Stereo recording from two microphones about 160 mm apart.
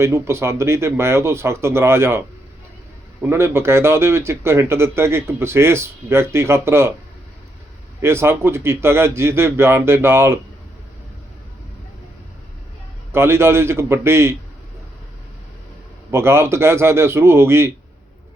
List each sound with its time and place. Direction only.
0.0 s a man's voice: 15° right (ahead or behind)
8.0 s a man's voice: 15° right (ahead or behind)
13.1 s a man's voice: 15° right (ahead or behind)
16.1 s a man's voice: 15° right (ahead or behind)